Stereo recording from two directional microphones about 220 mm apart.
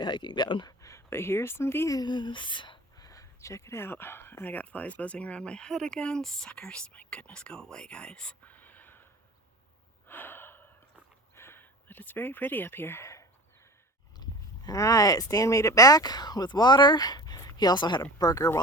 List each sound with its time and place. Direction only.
0.0 s speech: 20° left (ahead or behind)
10.1 s gasp: 10° left (ahead or behind)
11.3 s a sound: 10° left (ahead or behind)
14.2 s speech: 15° left (ahead or behind)